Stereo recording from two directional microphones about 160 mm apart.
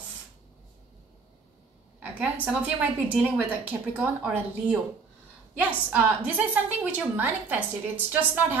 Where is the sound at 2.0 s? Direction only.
10° right (ahead or behind).